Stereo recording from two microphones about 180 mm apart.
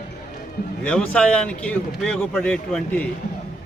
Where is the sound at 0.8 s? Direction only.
5° left (ahead or behind).